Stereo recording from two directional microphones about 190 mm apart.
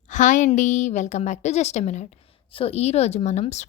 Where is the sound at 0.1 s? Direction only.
40° left (ahead or behind).